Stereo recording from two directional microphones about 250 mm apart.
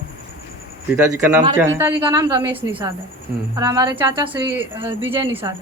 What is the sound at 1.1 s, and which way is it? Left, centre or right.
Speech, centre.